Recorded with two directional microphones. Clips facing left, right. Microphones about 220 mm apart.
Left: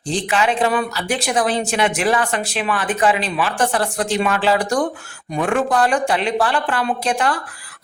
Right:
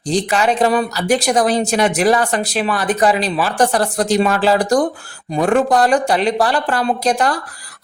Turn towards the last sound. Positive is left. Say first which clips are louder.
# right 3 dB
turn(degrees=-40)  # may be behind; listen again after turning